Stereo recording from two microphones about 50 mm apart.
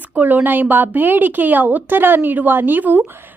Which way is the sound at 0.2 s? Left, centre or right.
Right.